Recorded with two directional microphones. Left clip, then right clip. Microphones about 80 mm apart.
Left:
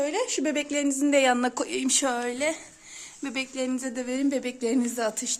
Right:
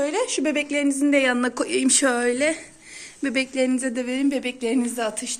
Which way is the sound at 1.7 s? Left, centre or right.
Left.